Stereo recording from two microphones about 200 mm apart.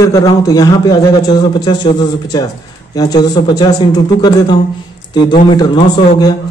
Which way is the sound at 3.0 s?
20° left (ahead or behind).